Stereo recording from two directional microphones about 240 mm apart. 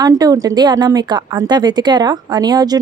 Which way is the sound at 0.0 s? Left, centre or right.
Centre.